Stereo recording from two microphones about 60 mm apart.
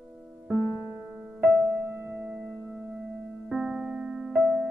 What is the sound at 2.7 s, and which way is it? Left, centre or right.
Singing bowl, right.